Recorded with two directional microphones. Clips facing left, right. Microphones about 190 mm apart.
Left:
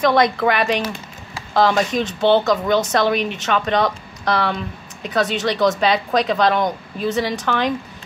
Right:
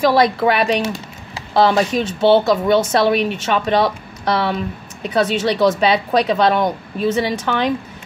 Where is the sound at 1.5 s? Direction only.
30° right (ahead or behind).